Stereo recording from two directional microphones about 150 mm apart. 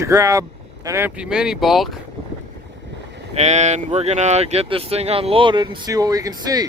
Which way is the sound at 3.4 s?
50° right (ahead or behind).